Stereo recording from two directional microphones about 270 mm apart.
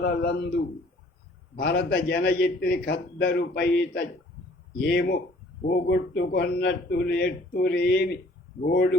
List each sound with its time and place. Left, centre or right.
0.0 s a man's voice: left
1.5 s a man's voice: left